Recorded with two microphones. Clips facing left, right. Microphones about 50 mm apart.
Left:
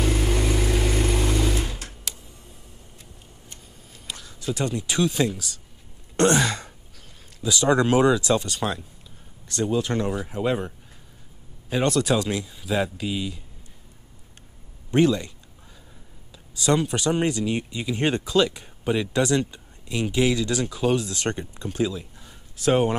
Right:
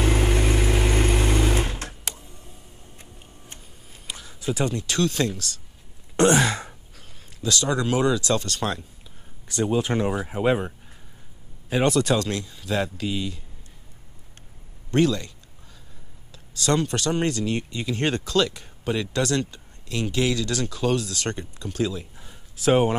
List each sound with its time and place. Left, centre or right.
0.0 s vehicle: right
3.4 s a sound: centre
4.7 s speech: centre
6.1 s a sound: centre
7.4 s speech: centre
7.7 s speech: left
8.4 s speech: centre
9.5 s speech: centre
11.7 s speech: centre
12.0 s speech: centre
14.9 s speech: centre
22.1 s a sound: centre